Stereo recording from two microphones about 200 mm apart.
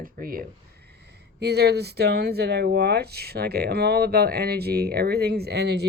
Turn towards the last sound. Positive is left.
turn(degrees=-55)  # may be behind; listen again after turning